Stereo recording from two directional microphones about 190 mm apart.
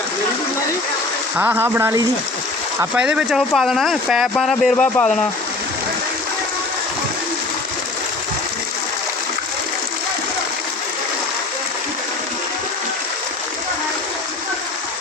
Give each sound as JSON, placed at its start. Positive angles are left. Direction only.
{"t": 1.4, "sound": "speech", "side_deg": -10}